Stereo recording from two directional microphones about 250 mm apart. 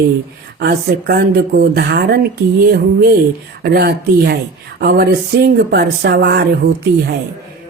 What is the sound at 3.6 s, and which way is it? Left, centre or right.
A woman's voice, right.